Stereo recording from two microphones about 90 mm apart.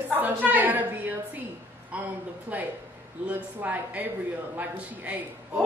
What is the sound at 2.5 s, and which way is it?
A man's voice, 15° right (ahead or behind).